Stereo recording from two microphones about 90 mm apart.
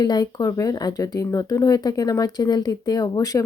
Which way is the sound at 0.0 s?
50° left (ahead or behind).